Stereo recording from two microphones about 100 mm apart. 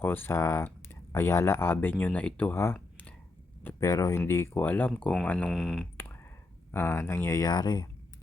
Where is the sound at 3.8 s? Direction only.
35° left (ahead or behind); by 5.5 s 15° left (ahead or behind).